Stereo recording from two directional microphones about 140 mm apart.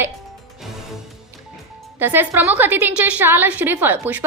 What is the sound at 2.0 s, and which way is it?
A woman's voice, 15° right (ahead or behind).